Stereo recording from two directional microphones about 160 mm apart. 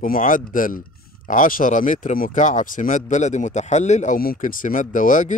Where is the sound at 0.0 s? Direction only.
55° left (ahead or behind).